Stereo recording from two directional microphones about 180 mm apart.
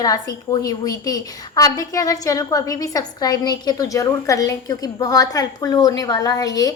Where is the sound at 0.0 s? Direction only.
20° left (ahead or behind).